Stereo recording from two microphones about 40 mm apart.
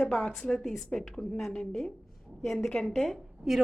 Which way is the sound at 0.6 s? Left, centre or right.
Centre.